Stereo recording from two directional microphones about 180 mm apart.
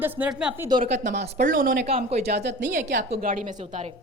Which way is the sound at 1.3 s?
45° right (ahead or behind).